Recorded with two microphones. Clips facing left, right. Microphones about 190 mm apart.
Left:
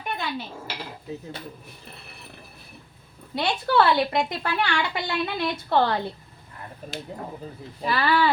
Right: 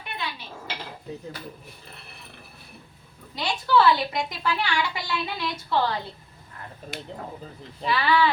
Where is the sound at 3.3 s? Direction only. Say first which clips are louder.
Left 1 dB; 60° left (ahead or behind).